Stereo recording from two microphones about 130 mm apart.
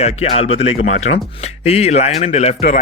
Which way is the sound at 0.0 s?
55° left (ahead or behind).